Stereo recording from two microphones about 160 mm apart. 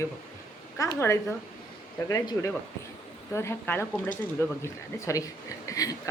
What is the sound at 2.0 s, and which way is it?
A woman's voice, 25° left (ahead or behind).